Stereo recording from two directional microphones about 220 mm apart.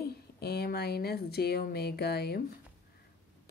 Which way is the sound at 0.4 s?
45° left (ahead or behind).